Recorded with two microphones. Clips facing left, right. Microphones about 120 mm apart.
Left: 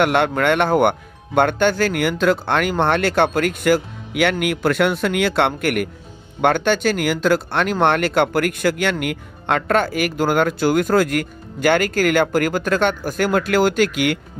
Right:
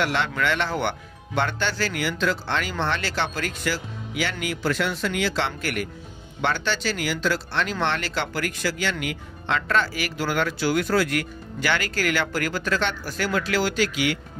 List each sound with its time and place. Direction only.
0.0 s speech: 55° left (ahead or behind)